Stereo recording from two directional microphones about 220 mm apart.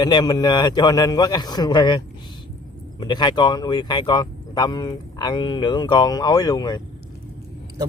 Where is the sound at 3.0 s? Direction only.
20° left (ahead or behind).